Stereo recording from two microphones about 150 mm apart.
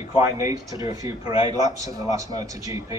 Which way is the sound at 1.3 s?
40° left (ahead or behind).